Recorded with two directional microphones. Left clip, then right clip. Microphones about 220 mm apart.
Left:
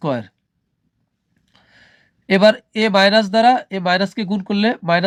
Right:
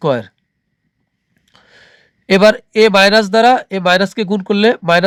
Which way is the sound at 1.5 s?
35° right (ahead or behind).